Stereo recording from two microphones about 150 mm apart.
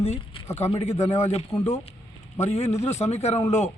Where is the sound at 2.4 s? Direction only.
45° left (ahead or behind).